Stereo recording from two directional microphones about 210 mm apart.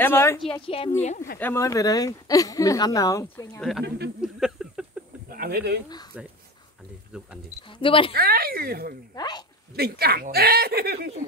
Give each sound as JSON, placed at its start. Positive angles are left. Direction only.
{"t": 0.0, "sound": "speech", "side_deg": 10}
{"t": 0.5, "sound": "a woman's voice", "side_deg": 25}
{"t": 1.0, "sound": "speech", "side_deg": 40}
{"t": 1.4, "sound": "speech", "side_deg": 15}
{"t": 4.2, "sound": "a sound", "side_deg": -5}
{"t": 5.3, "sound": "speech", "side_deg": -45}
{"t": 7.8, "sound": "a woman's voice", "side_deg": 25}
{"t": 8.1, "sound": "speech", "side_deg": -45}
{"t": 9.1, "sound": "a woman's voice", "side_deg": 20}
{"t": 9.8, "sound": "speech", "side_deg": -50}